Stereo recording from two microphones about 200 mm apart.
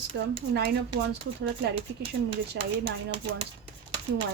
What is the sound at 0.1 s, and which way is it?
Speech, 65° right (ahead or behind).